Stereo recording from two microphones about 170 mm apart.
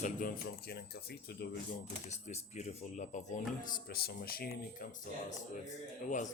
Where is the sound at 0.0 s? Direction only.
55° left (ahead or behind); by 1.5 s 75° left (ahead or behind).